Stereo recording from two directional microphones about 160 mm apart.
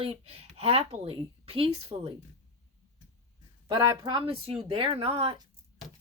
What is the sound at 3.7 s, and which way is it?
Speech, 30° right (ahead or behind).